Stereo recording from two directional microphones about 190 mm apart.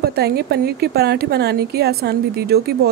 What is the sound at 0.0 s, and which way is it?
A woman's voice, 55° right (ahead or behind).